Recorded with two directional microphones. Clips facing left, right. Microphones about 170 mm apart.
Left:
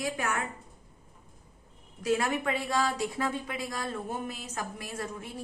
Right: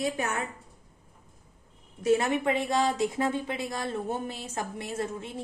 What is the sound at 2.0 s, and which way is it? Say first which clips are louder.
A woman's voice: right 4 dB; 20° right (ahead or behind).